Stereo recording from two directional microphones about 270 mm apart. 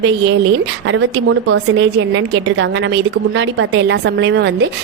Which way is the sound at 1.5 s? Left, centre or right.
Right.